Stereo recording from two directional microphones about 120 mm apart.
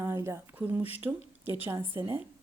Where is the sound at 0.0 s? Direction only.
20° right (ahead or behind).